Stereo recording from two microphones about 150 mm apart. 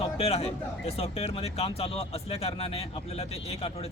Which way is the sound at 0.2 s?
45° left (ahead or behind).